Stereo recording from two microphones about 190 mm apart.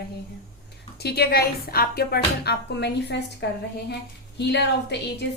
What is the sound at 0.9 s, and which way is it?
Speech, 55° left (ahead or behind).